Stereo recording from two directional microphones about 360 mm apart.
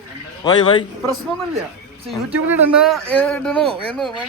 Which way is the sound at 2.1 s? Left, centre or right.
Centre.